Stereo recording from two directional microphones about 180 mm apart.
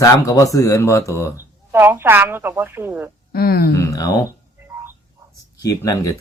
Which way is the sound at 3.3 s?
60° left (ahead or behind).